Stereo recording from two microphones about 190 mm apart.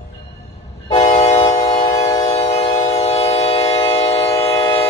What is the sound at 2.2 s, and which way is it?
Train, 30° left (ahead or behind).